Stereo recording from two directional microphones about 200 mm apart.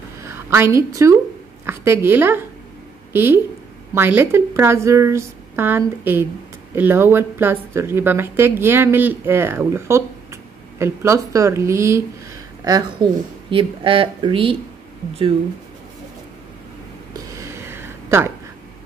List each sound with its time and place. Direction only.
0.2 s a woman's voice: 15° right (ahead or behind)
13.0 s speech: 20° right (ahead or behind)
17.1 s a sound: 15° right (ahead or behind)